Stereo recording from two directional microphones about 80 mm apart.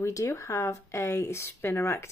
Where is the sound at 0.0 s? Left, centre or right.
Left.